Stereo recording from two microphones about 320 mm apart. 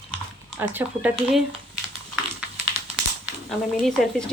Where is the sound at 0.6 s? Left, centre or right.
Centre.